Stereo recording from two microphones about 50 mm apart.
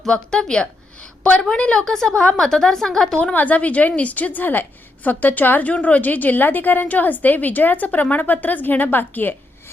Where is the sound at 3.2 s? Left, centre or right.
Left.